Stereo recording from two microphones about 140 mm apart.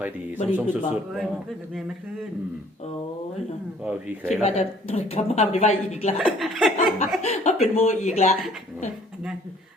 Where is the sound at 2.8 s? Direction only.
50° left (ahead or behind).